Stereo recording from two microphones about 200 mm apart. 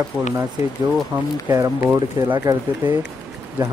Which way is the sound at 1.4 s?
15° right (ahead or behind).